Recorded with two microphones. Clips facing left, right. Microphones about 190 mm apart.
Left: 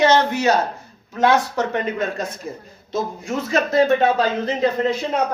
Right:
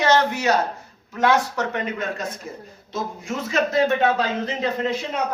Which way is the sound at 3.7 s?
35° left (ahead or behind).